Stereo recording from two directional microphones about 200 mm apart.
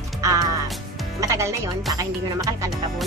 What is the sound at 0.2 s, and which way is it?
Music, 15° right (ahead or behind).